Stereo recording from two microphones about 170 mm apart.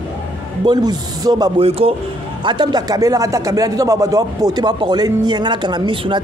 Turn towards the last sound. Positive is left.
turn(degrees=-30)  # may be behind; listen again after turning